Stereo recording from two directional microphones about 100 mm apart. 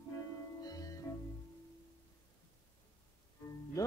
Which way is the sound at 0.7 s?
35° left (ahead or behind).